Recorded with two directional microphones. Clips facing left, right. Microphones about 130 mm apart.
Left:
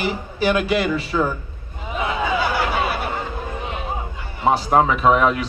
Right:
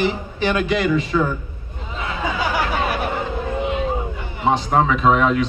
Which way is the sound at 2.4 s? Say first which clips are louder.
Even; 15° right (ahead or behind).